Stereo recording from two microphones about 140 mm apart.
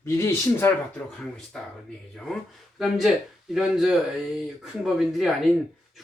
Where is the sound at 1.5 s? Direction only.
5° left (ahead or behind).